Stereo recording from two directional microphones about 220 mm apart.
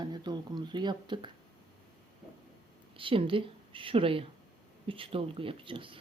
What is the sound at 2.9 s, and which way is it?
A woman's voice, 25° right (ahead or behind).